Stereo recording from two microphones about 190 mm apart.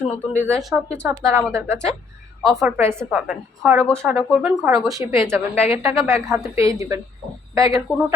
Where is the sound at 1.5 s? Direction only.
15° right (ahead or behind).